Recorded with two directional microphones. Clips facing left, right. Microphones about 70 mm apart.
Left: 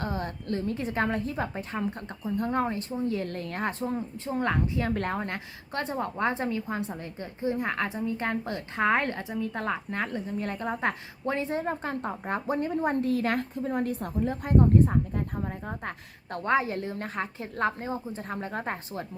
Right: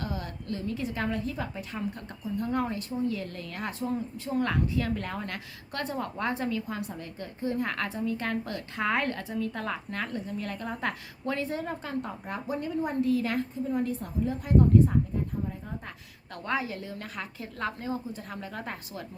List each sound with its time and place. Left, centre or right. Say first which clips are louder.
0.0 s a woman's voice: left 3 dB; left
4.9 s a woman's voice: left 5 dB; left